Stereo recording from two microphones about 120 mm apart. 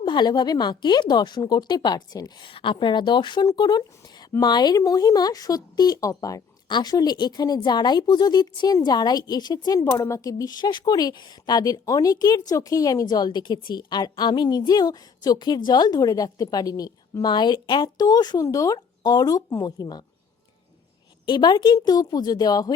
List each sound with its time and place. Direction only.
0.0 s speech: 40° left (ahead or behind)
9.8 s speech: 20° left (ahead or behind)
21.2 s speech: 40° left (ahead or behind)